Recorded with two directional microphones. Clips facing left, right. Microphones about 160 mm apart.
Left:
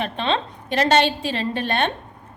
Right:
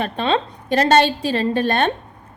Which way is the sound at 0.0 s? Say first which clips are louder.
Right 3 dB; 40° right (ahead or behind).